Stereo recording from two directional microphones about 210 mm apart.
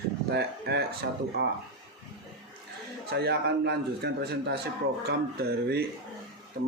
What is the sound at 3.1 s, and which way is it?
A man's voice, 50° right (ahead or behind).